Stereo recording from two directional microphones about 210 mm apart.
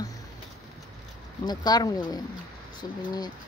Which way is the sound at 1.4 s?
20° left (ahead or behind).